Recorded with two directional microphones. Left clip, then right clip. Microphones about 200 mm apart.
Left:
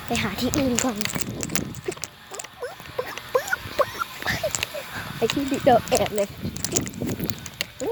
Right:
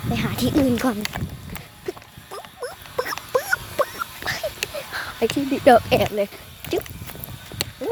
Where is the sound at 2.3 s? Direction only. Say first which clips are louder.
Right 3 dB; 15° right (ahead or behind).